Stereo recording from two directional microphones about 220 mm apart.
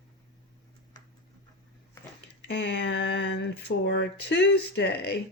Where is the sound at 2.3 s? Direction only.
50° left (ahead or behind).